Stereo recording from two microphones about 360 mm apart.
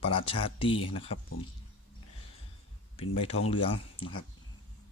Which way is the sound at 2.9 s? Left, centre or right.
Centre.